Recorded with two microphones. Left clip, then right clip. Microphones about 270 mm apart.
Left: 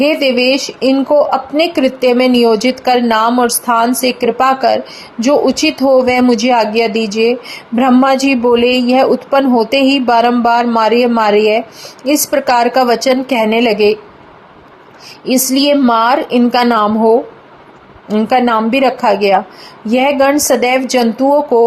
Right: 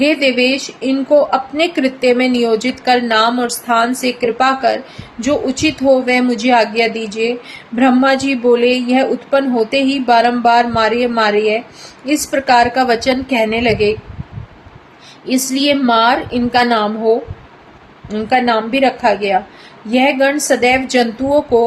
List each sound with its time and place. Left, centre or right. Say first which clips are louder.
0.0 s speech: left 2 dB; left
15.3 s speech: left 4 dB; left
18.1 s speech: left 2 dB; left